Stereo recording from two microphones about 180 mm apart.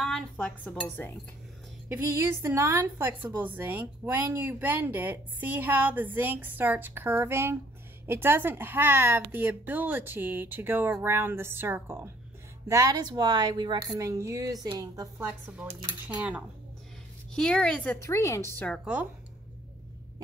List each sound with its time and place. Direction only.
0.0 s a woman's voice: 5° left (ahead or behind)
1.9 s a woman's voice: 15° right (ahead or behind)
17.4 s a woman's voice: 5° left (ahead or behind)
18.7 s speech: 5° right (ahead or behind)